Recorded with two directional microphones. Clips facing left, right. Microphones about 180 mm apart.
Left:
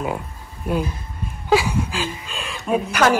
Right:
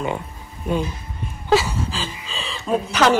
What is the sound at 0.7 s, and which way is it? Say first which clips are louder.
A woman's voice: even; 5° left (ahead or behind).